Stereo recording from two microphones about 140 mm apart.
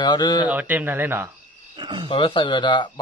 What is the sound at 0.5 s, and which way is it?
Speech, 10° right (ahead or behind).